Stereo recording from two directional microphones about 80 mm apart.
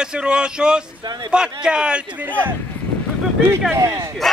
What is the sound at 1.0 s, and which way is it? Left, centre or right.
Speech, right.